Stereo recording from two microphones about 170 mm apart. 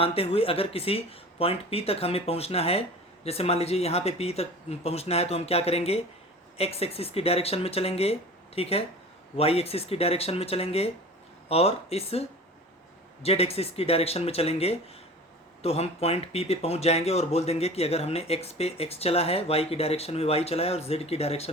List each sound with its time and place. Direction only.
0.0 s speech: 35° left (ahead or behind)
13.2 s speech: 35° left (ahead or behind)